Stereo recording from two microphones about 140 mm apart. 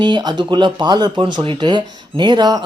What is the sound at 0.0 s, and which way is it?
Speech, 30° right (ahead or behind).